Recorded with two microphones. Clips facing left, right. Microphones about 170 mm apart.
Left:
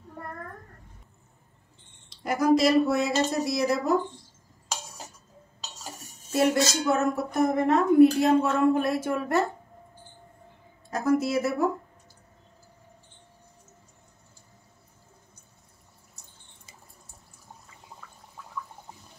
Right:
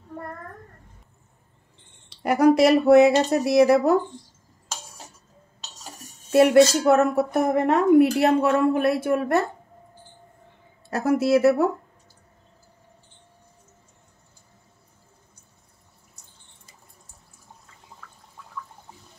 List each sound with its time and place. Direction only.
2.0 s speech: 65° right (ahead or behind)
6.3 s speech: 65° right (ahead or behind)
10.9 s speech: 70° right (ahead or behind)